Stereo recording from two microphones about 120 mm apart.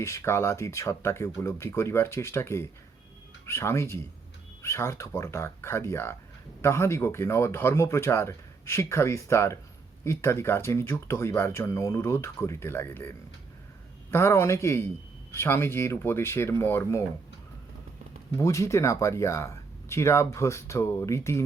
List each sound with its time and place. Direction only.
0.0 s speech: 25° left (ahead or behind)
18.3 s speech: 25° left (ahead or behind)